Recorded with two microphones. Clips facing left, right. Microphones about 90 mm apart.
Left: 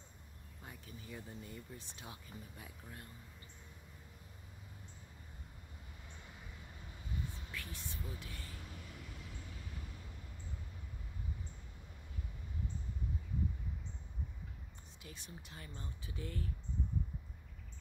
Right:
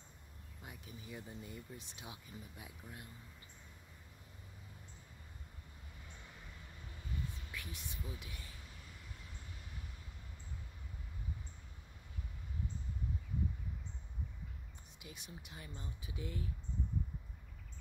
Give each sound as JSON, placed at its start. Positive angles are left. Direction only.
{"t": 0.7, "sound": "speech", "side_deg": -15}
{"t": 7.5, "sound": "speech", "side_deg": -15}
{"t": 15.0, "sound": "speech", "side_deg": -15}